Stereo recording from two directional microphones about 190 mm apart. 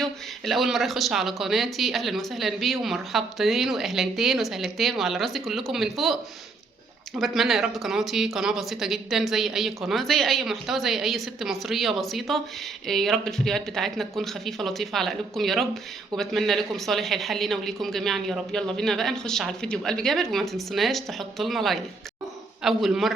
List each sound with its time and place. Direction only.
0.0 s speech: centre (ahead or behind)
7.2 s speech: centre (ahead or behind)